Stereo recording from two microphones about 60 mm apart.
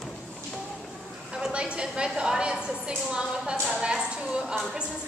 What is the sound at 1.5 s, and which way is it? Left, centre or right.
A woman's voice, centre.